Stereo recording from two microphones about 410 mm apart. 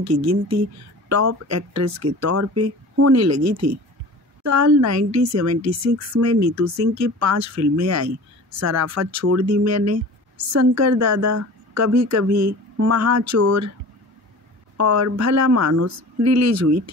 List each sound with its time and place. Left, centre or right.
0.0 s speech: right
14.8 s speech: right